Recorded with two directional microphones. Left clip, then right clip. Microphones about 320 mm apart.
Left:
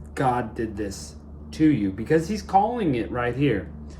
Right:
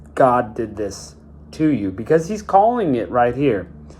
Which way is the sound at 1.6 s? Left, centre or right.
Right.